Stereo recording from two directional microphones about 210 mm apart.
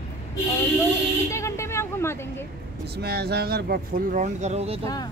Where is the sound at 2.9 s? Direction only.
50° right (ahead or behind); by 4.8 s 30° right (ahead or behind).